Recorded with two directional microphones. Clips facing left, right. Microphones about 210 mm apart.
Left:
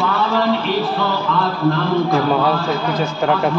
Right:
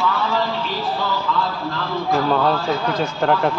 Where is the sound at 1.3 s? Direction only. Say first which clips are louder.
Even; 65° left (ahead or behind).